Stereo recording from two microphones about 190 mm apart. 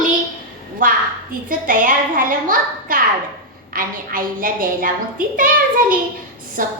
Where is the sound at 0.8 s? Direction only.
45° right (ahead or behind).